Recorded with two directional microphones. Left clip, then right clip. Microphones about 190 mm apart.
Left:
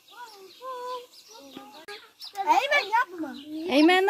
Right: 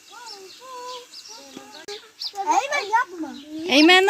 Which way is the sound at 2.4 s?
20° left (ahead or behind).